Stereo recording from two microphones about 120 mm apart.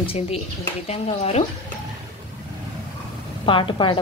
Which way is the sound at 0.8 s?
60° left (ahead or behind).